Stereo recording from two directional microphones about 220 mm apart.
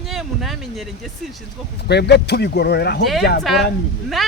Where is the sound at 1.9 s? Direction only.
50° left (ahead or behind).